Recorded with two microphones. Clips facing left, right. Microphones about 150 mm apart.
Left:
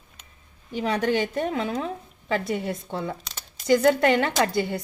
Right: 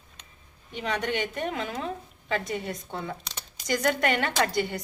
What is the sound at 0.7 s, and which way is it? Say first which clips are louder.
A woman's voice: left 6 dB; 35° left (ahead or behind).